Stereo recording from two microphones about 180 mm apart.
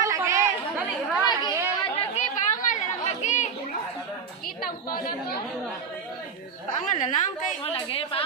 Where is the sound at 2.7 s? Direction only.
40° left (ahead or behind).